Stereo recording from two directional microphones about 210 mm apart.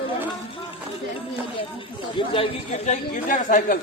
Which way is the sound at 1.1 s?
25° left (ahead or behind).